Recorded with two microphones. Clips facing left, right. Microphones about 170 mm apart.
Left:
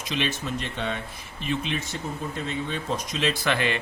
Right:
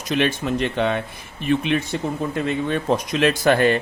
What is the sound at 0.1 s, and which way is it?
Speech, 55° right (ahead or behind).